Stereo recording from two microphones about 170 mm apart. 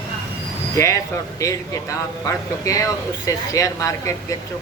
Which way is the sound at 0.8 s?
15° left (ahead or behind).